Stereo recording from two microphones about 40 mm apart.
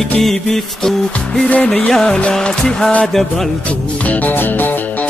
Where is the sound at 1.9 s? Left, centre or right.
Centre.